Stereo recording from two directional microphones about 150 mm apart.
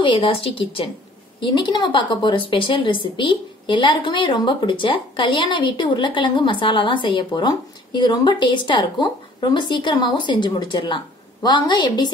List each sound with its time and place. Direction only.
0.0 s a woman's voice: 35° left (ahead or behind)